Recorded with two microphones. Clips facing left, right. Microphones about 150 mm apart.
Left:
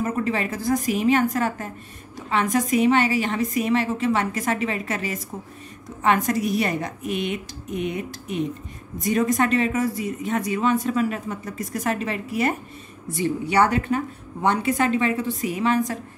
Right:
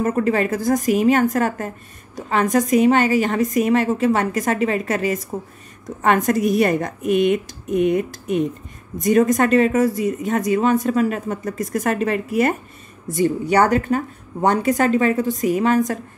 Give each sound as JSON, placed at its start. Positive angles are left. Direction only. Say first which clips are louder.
{"t": 0.0, "sound": "speech", "louder": "right 6 dB", "side_deg": -45}